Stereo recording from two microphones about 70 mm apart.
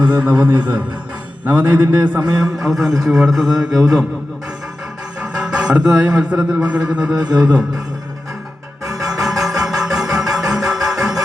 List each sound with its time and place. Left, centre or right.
0.2 s a man's voice: right
1.8 s a man's voice: right
2.4 s speech: centre
5.2 s music: centre
6.3 s a man's voice: centre
9.2 s music: centre